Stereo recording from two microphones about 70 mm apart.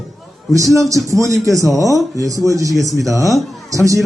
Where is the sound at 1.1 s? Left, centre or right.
Right.